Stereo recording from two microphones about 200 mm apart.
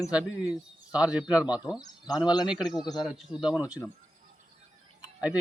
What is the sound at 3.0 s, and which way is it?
Speech, centre (ahead or behind).